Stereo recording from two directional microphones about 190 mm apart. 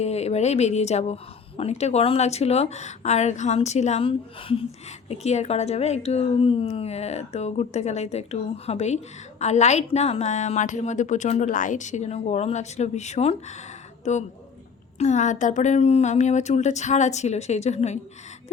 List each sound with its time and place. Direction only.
0.0 s a woman's voice: 35° left (ahead or behind)